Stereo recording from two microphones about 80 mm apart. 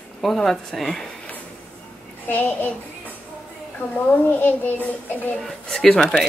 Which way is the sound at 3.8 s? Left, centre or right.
Left.